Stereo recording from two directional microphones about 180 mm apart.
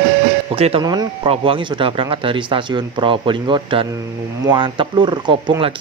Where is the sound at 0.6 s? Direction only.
30° right (ahead or behind).